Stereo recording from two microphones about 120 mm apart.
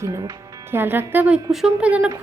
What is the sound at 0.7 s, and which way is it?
A woman's voice, 20° right (ahead or behind).